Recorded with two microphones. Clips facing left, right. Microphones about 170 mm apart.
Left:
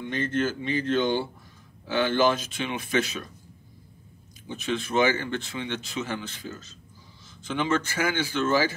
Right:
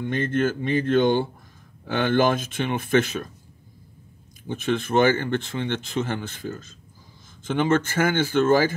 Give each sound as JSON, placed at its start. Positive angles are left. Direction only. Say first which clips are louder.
{"t": 0.0, "sound": "speech", "louder": "right 4 dB", "side_deg": -55}
{"t": 4.5, "sound": "speech", "louder": "right 5 dB", "side_deg": -50}